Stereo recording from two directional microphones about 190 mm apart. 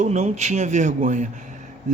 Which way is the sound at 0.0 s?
40° right (ahead or behind).